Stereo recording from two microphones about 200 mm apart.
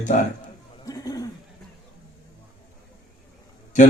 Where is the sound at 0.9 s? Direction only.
20° left (ahead or behind).